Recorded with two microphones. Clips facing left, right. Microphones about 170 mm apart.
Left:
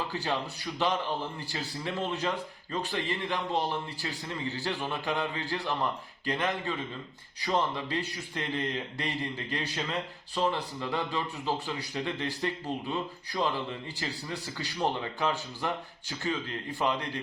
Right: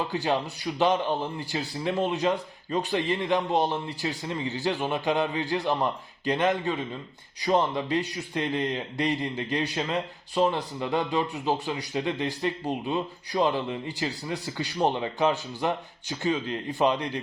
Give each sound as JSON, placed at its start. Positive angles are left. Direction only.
{"t": 0.1, "sound": "speech", "side_deg": -20}